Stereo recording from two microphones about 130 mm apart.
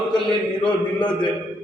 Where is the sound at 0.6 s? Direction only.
10° left (ahead or behind).